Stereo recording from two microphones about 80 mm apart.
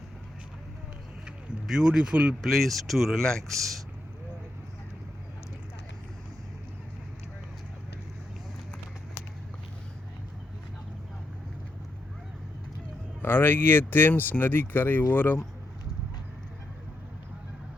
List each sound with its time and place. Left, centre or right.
1.6 s speech: centre
2.4 s speech: centre
13.2 s speech: left